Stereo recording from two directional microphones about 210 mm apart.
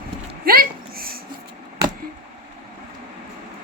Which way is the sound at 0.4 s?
45° right (ahead or behind).